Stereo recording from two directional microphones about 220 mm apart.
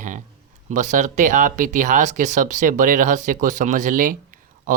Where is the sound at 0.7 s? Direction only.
35° right (ahead or behind).